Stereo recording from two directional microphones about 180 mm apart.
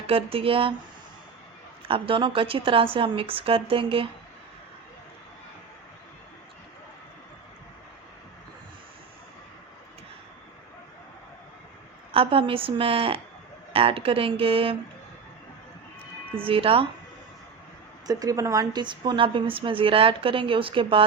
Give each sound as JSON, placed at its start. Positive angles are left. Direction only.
{"t": 0.1, "sound": "a woman's voice", "side_deg": -30}
{"t": 1.9, "sound": "a woman's voice", "side_deg": -30}
{"t": 12.1, "sound": "a woman's voice", "side_deg": -30}
{"t": 16.4, "sound": "a woman's voice", "side_deg": -30}
{"t": 18.0, "sound": "a woman's voice", "side_deg": -20}